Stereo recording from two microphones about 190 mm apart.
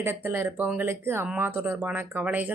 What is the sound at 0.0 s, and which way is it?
Speech, 10° right (ahead or behind).